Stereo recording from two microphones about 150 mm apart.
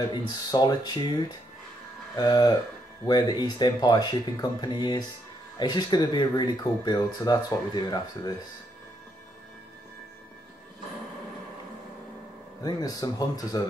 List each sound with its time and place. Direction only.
0.1 s speech: 30° left (ahead or behind)
12.6 s speech: 25° left (ahead or behind)